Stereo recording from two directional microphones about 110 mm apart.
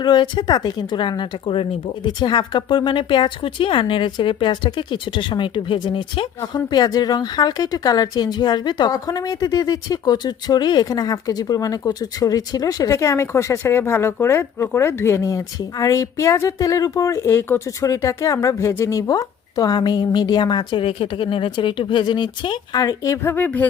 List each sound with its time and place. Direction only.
0.0 s speech: 45° left (ahead or behind)
17.2 s speech: 20° left (ahead or behind); by 20.8 s 40° left (ahead or behind)
20.8 s speech: 55° left (ahead or behind); by 23.6 s 15° left (ahead or behind)